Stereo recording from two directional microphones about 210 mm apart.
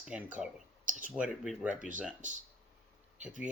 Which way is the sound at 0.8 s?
35° right (ahead or behind).